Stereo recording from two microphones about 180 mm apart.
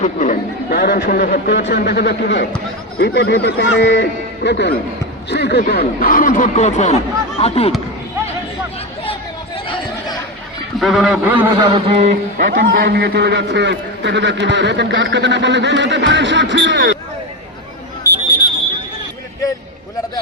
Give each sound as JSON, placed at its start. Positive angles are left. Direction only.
{"t": 0.0, "sound": "speech", "side_deg": 45}
{"t": 0.8, "sound": "a man's voice", "side_deg": 60}
{"t": 10.8, "sound": "a man's voice", "side_deg": 0}
{"t": 11.5, "sound": "a man's voice", "side_deg": -25}
{"t": 12.7, "sound": "a man's voice", "side_deg": -60}